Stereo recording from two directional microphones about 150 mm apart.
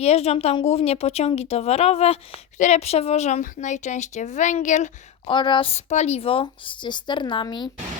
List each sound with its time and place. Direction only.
0.0 s a woman's voice: 45° left (ahead or behind)
5.2 s speech: 30° left (ahead or behind)